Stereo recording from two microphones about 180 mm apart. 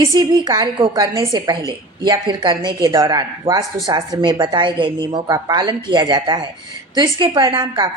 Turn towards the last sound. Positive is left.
turn(degrees=-25)  # may be behind; listen again after turning